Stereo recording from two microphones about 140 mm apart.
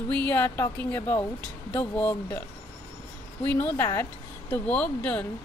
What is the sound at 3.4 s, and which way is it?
Speech, 15° left (ahead or behind).